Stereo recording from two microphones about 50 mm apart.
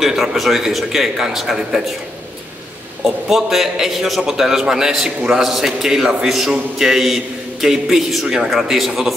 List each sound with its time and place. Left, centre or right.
0.0 s a man's voice: centre
3.3 s a man's voice: centre